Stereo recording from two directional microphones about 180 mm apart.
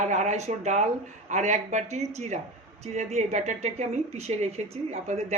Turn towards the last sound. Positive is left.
turn(degrees=-40)  # may be behind; listen again after turning